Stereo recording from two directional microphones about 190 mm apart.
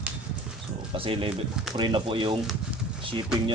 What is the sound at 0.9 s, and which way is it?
Speech, 30° right (ahead or behind).